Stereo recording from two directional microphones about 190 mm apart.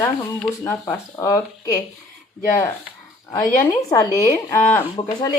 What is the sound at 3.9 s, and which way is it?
Speech, 15° left (ahead or behind).